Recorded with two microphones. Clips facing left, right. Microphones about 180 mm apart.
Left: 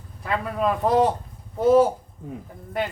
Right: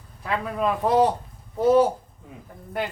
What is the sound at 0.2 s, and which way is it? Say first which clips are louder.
A man's voice: left 1 dB; centre (ahead or behind).